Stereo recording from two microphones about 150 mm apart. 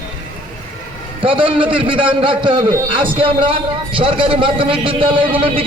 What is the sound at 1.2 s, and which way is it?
A man's voice, 35° right (ahead or behind).